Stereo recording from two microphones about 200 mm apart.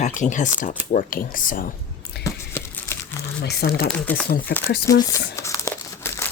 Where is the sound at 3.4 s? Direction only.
55° left (ahead or behind).